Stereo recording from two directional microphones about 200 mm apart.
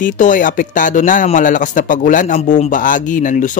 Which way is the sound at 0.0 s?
40° left (ahead or behind).